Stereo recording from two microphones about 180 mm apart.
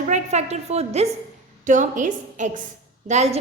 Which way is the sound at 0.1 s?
40° right (ahead or behind).